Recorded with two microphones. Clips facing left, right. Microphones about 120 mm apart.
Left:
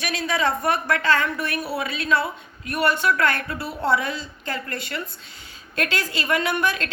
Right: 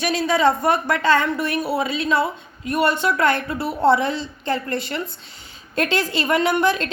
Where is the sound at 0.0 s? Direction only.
30° right (ahead or behind).